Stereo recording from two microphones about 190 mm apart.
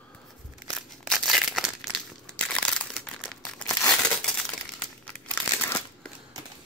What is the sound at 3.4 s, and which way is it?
Crumpling, 10° left (ahead or behind).